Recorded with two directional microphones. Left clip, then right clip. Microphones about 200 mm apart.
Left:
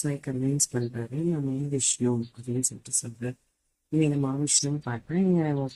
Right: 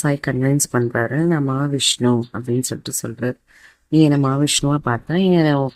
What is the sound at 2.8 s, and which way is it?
Speech, 40° right (ahead or behind).